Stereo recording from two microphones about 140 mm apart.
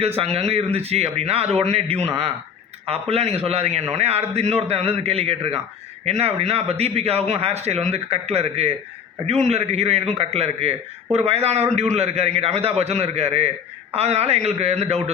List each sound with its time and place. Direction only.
0.2 s a man's voice: 45° right (ahead or behind)